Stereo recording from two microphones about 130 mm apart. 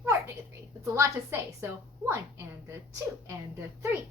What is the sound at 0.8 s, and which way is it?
Speech, 20° right (ahead or behind).